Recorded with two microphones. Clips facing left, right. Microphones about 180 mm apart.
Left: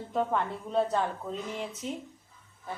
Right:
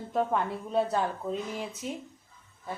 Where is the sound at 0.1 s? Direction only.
5° right (ahead or behind).